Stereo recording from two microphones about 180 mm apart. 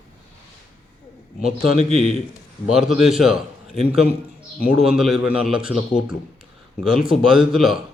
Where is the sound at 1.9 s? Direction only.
35° right (ahead or behind).